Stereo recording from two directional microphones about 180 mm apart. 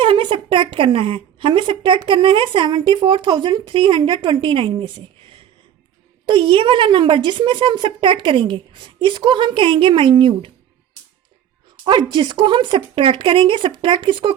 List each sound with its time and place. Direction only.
0.0 s a woman's voice: 30° right (ahead or behind)
11.9 s a woman's voice: 25° right (ahead or behind)